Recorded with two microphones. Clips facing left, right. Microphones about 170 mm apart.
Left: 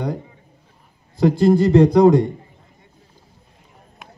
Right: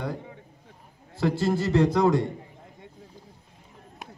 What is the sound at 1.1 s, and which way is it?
A man's voice, 15° left (ahead or behind).